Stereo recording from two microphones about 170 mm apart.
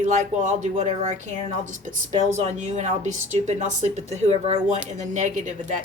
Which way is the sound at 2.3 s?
45° right (ahead or behind).